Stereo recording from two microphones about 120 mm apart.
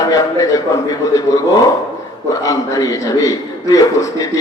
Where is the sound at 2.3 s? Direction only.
30° left (ahead or behind).